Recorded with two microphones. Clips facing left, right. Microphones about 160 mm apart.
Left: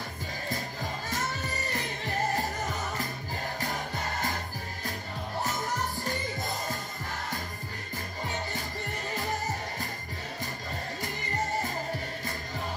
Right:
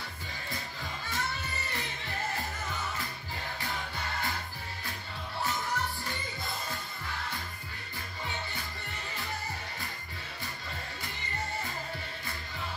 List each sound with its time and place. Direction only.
1.0 s music: 45° left (ahead or behind)
5.4 s music: 45° left (ahead or behind)
9.1 s music: 45° left (ahead or behind)
11.0 s music: 45° left (ahead or behind)